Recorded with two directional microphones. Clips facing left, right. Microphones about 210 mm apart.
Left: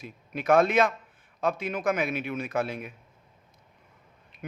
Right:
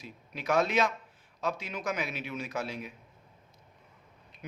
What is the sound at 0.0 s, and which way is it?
A man's voice, 55° left (ahead or behind).